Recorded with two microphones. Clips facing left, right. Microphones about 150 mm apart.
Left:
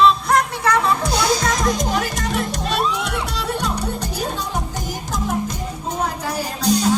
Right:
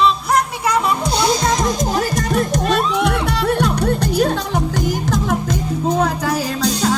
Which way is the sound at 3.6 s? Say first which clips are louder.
Right 7 dB; 65° right (ahead or behind).